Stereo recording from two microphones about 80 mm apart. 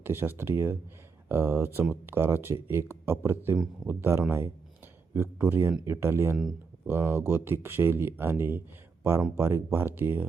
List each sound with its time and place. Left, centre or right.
0.0 s speech: right
6.3 s speech: centre
6.8 s speech: right